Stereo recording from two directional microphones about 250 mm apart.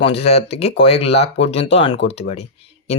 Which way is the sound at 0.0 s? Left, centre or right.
Left.